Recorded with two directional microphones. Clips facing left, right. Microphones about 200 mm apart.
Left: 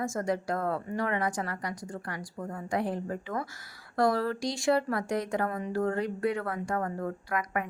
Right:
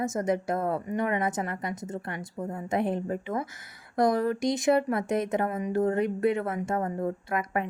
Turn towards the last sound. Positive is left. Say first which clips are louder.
# right 3 dB
turn(degrees=-25)  # may be behind; listen again after turning